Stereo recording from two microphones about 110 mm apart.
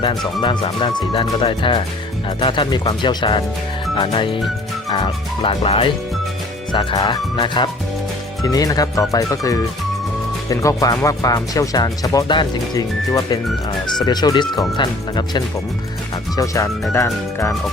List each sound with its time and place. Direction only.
0.0 s speech: 45° left (ahead or behind)
6.7 s speech: 40° left (ahead or behind)
8.4 s speech: 35° left (ahead or behind)
16.3 s speech: 30° left (ahead or behind)